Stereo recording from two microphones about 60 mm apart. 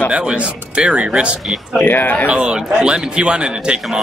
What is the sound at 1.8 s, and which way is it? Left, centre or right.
Speech, left.